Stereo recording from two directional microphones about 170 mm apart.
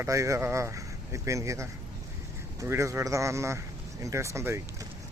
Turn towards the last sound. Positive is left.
turn(degrees=-15)  # may be behind; listen again after turning